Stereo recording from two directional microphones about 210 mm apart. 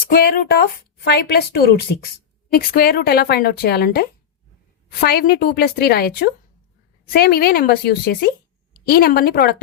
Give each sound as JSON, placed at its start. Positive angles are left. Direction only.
{"t": 0.1, "sound": "a woman's voice", "side_deg": 45}